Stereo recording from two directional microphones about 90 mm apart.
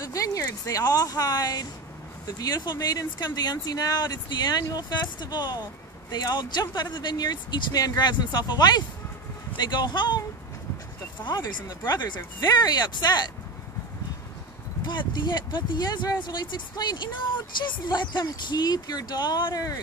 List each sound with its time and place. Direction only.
0.0 s speech: 40° left (ahead or behind); by 10.2 s 55° left (ahead or behind)
11.2 s speech: 55° left (ahead or behind)
14.9 s speech: 55° left (ahead or behind)